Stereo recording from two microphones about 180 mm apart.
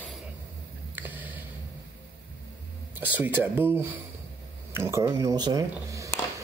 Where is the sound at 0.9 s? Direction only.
10° right (ahead or behind).